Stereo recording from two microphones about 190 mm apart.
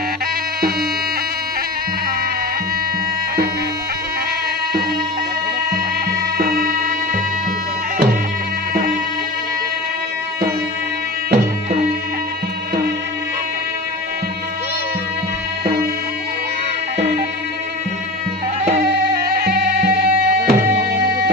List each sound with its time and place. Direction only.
6.3 s tabla: 50° right (ahead or behind)
18.8 s music: 55° right (ahead or behind)